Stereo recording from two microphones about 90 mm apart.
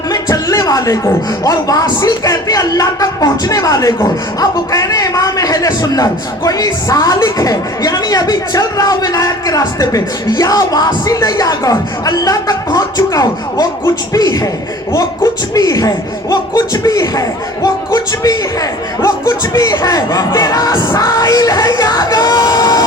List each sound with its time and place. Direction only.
0.1 s a sound: 45° left (ahead or behind)
1.5 s a man's voice: 40° left (ahead or behind)
19.5 s a man's voice: 45° left (ahead or behind)